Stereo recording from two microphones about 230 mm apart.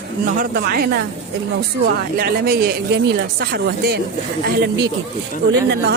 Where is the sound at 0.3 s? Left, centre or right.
Right.